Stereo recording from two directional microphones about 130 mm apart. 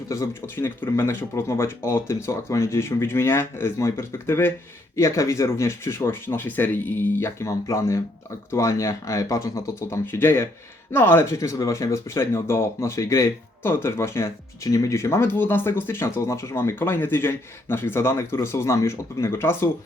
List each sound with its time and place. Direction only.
0.1 s speech: 20° left (ahead or behind)